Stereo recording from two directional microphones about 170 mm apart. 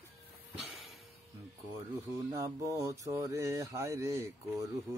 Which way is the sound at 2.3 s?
20° right (ahead or behind).